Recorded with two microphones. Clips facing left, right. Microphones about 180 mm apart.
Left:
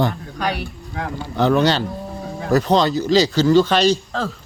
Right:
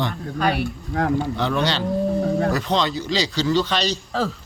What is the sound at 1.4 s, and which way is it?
Speech, 45° left (ahead or behind).